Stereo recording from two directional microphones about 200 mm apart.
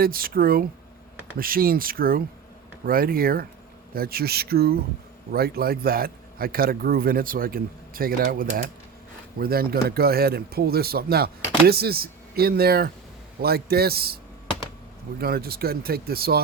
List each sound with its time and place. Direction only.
0.0 s speech: 45° right (ahead or behind)
15.2 s speech: 50° right (ahead or behind)